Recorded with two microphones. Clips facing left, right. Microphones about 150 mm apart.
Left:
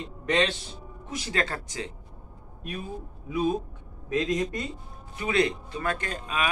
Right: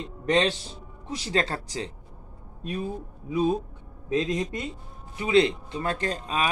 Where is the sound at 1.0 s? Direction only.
30° right (ahead or behind).